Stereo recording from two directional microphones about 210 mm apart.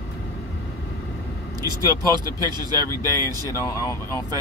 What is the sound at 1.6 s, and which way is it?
Speech, 20° right (ahead or behind).